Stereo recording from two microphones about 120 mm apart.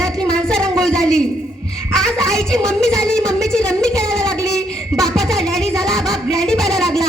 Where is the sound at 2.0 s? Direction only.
5° left (ahead or behind).